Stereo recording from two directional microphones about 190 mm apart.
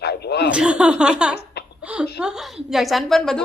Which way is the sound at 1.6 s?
60° left (ahead or behind).